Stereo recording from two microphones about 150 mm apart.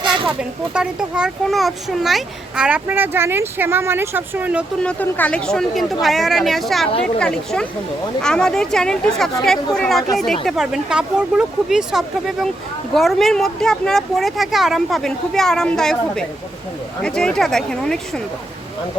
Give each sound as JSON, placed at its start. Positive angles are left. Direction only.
{"t": 0.0, "sound": "a sound", "side_deg": -35}
{"t": 0.3, "sound": "a child's voice", "side_deg": -5}
{"t": 4.8, "sound": "a woman's voice", "side_deg": 10}